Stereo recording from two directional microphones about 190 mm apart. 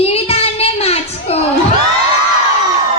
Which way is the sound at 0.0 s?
30° left (ahead or behind).